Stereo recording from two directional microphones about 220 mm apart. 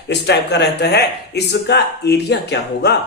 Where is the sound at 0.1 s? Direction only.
50° left (ahead or behind).